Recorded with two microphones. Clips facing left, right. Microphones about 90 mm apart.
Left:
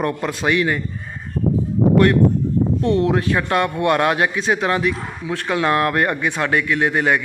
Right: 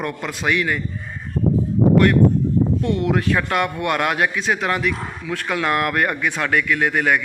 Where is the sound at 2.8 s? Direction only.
30° left (ahead or behind).